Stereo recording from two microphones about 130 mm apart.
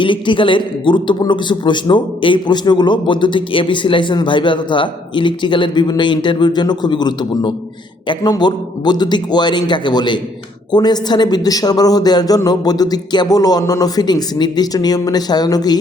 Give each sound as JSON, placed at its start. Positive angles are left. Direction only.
{"t": 0.0, "sound": "a man's voice", "side_deg": 40}